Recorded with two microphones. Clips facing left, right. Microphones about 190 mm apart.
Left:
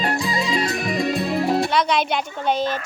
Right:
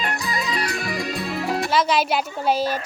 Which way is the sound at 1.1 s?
45° left (ahead or behind).